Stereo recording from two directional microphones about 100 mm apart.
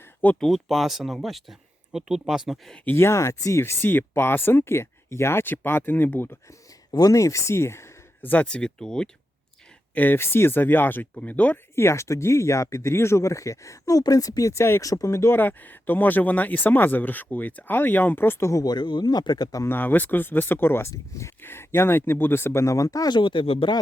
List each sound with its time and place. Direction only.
0.0 s a sound: 15° left (ahead or behind)
0.3 s speech: centre (ahead or behind)
2.8 s speech: 25° left (ahead or behind)
6.9 s speech: 35° left (ahead or behind); by 9.0 s 5° left (ahead or behind)
9.9 s speech: 20° left (ahead or behind)
11.7 s speech: 25° left (ahead or behind)
18.6 s speech: 45° left (ahead or behind)
19.6 s speech: 20° left (ahead or behind); by 23.7 s 65° left (ahead or behind)